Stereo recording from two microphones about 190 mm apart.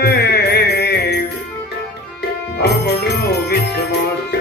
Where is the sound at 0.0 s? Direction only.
60° left (ahead or behind).